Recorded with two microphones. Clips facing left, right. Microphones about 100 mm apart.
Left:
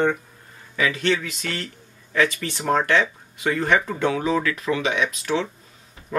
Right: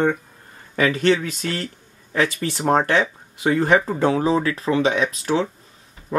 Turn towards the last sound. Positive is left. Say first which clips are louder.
# right 3 dB
turn(degrees=-35)  # may be behind; listen again after turning